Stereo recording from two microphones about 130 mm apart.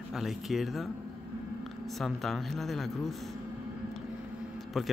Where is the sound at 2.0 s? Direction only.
Centre (ahead or behind).